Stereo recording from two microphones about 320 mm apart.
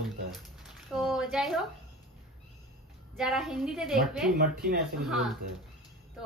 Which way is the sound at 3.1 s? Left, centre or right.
Centre.